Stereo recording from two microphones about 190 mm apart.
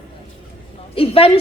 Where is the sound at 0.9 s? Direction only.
30° left (ahead or behind).